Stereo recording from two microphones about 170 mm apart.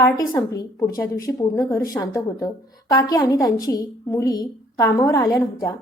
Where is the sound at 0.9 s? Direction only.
20° left (ahead or behind).